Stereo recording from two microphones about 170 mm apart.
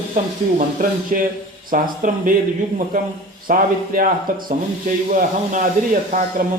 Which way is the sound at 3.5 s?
55° right (ahead or behind).